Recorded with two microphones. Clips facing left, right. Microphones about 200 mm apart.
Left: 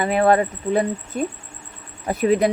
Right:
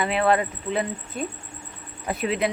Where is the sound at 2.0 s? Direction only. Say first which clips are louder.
Left 7 dB; 40° left (ahead or behind).